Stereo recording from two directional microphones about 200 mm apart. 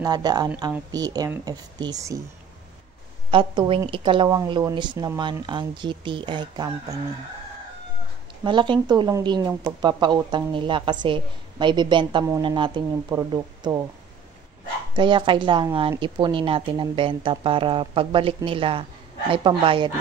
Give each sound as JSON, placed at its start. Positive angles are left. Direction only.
{"t": 0.0, "sound": "speech", "side_deg": -20}
{"t": 3.3, "sound": "speech", "side_deg": -25}
{"t": 8.5, "sound": "speech", "side_deg": -25}
{"t": 15.0, "sound": "speech", "side_deg": -25}